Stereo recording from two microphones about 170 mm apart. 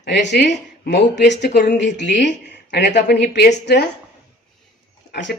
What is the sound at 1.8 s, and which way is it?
Speech, 90° left.